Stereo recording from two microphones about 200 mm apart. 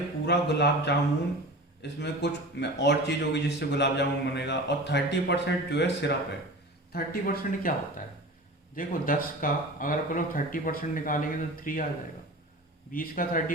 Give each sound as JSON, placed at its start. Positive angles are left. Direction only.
{"t": 0.3, "sound": "a man's voice", "side_deg": 60}
{"t": 6.9, "sound": "speech", "side_deg": 50}
{"t": 8.7, "sound": "speech", "side_deg": 45}
{"t": 12.9, "sound": "speech", "side_deg": 45}